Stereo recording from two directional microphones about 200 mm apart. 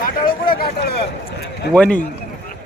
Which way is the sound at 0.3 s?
45° left (ahead or behind).